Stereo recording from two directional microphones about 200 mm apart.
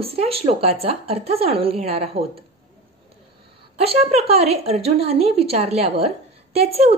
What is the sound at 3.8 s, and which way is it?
A woman's voice, 30° right (ahead or behind).